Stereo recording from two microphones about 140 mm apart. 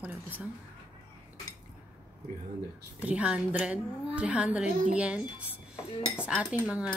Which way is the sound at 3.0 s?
10° right (ahead or behind).